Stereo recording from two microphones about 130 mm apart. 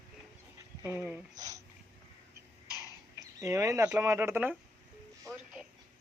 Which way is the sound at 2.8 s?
25° right (ahead or behind).